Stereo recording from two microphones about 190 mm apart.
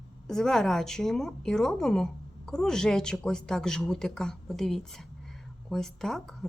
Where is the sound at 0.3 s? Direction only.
Centre (ahead or behind).